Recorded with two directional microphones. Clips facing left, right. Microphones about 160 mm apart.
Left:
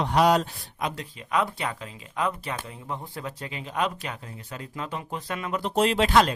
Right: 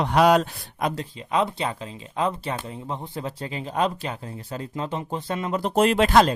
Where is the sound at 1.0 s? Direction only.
25° right (ahead or behind).